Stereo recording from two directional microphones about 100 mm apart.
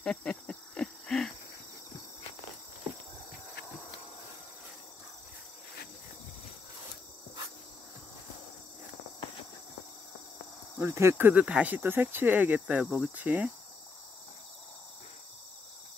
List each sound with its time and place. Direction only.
0.0 s cricket: 5° left (ahead or behind)
10.8 s speech: 25° right (ahead or behind)
12.8 s cricket: 5° right (ahead or behind)
13.2 s speech: 15° right (ahead or behind)